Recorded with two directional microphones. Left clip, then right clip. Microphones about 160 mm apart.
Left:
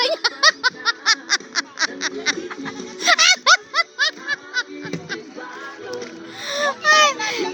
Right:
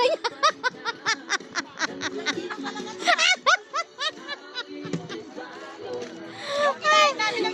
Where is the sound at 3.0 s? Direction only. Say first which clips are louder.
Left 6 dB; 10° right (ahead or behind).